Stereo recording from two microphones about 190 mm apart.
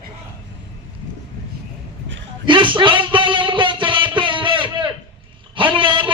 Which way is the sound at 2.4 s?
25° right (ahead or behind).